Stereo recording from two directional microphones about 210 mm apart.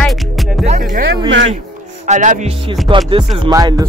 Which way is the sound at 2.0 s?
35° right (ahead or behind).